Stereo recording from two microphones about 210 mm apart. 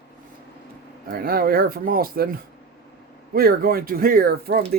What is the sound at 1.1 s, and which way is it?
Speech, 45° right (ahead or behind).